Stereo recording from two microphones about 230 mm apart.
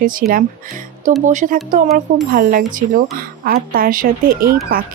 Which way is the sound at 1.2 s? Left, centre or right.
Right.